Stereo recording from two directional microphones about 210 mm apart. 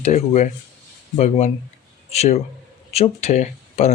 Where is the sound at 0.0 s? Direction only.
35° left (ahead or behind).